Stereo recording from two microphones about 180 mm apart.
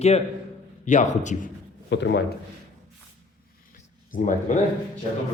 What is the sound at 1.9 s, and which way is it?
Speech, 75° left (ahead or behind).